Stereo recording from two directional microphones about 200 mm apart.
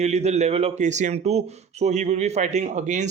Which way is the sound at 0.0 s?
35° right (ahead or behind).